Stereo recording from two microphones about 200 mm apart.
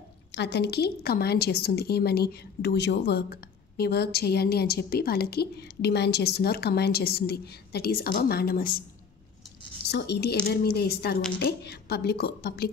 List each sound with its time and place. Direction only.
0.3 s a woman's voice: 60° left (ahead or behind)
9.8 s a woman's voice: 55° left (ahead or behind)